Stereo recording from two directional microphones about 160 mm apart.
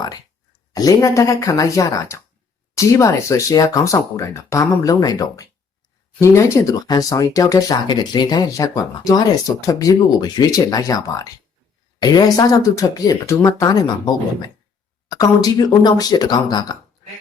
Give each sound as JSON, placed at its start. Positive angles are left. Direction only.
{"t": 0.7, "sound": "speech", "side_deg": 20}
{"t": 15.1, "sound": "speech", "side_deg": 25}